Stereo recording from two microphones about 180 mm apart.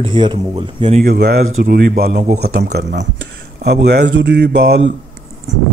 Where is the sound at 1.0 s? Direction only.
60° right (ahead or behind).